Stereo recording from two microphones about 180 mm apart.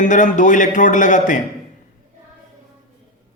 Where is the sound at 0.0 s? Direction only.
45° left (ahead or behind).